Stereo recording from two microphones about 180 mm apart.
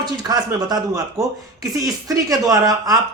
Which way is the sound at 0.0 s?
20° right (ahead or behind).